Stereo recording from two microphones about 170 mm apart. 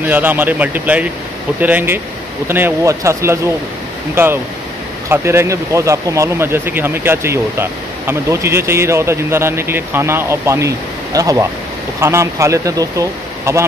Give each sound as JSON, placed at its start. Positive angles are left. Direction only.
{"t": 0.0, "sound": "speech", "side_deg": -10}